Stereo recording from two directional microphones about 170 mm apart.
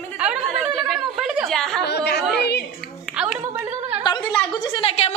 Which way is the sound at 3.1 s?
5° right (ahead or behind).